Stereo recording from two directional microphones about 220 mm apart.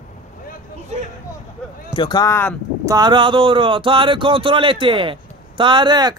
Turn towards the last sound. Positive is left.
turn(degrees=-20)  # may be behind; listen again after turning